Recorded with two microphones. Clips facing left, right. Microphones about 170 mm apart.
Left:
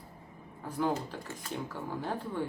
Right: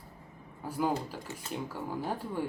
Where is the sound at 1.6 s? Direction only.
10° right (ahead or behind).